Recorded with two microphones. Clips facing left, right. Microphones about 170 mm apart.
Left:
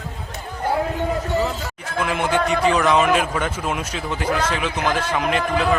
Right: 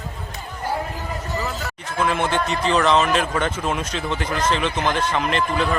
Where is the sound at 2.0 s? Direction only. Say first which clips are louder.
Left 1 dB; 10° left (ahead or behind).